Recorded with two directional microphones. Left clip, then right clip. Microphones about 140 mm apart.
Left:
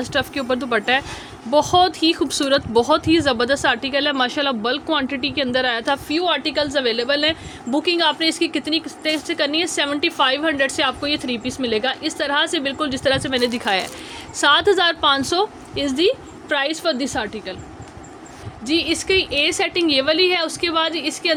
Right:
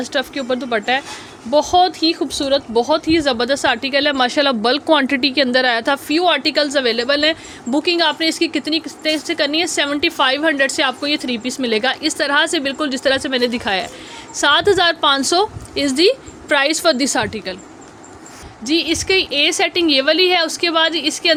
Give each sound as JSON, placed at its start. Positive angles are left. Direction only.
{"t": 0.0, "sound": "speech", "side_deg": -15}
{"t": 18.6, "sound": "speech", "side_deg": -30}